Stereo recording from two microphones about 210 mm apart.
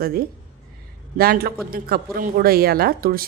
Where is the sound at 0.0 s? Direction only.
45° right (ahead or behind).